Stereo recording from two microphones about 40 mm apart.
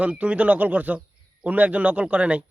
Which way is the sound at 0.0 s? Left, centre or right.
Right.